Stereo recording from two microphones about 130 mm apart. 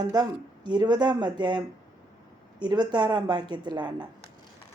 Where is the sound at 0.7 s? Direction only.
30° right (ahead or behind).